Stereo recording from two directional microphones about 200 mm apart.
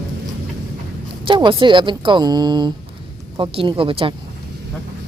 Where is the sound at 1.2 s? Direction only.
25° right (ahead or behind).